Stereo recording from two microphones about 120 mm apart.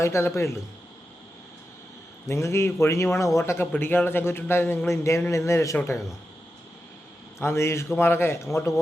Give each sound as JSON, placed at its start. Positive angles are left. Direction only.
{"t": 0.0, "sound": "a man's voice", "side_deg": 20}
{"t": 2.2, "sound": "a man's voice", "side_deg": 25}
{"t": 7.3, "sound": "a man's voice", "side_deg": 20}